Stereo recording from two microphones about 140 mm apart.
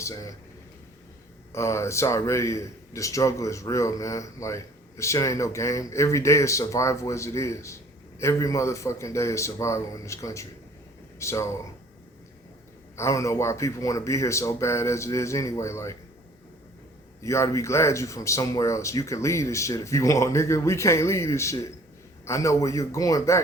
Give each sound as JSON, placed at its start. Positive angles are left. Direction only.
{"t": 0.0, "sound": "a man's voice", "side_deg": 25}
{"t": 1.5, "sound": "a man's voice", "side_deg": 20}
{"t": 13.0, "sound": "a man's voice", "side_deg": 20}
{"t": 17.2, "sound": "a man's voice", "side_deg": 20}